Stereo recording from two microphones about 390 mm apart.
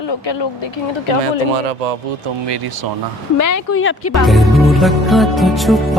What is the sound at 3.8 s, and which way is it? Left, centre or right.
Speech, left.